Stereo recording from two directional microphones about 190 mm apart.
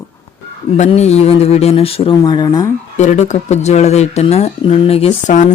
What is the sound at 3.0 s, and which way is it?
Speech, 40° left (ahead or behind).